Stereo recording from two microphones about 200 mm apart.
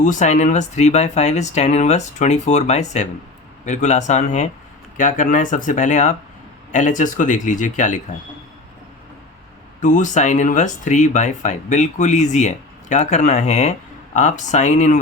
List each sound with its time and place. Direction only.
0.0 s speech: 35° left (ahead or behind)
9.8 s speech: 40° left (ahead or behind)